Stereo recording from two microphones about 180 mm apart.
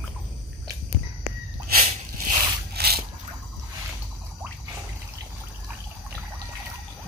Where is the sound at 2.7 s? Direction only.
60° right (ahead or behind).